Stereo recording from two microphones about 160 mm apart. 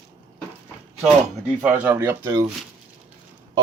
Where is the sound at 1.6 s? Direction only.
10° right (ahead or behind).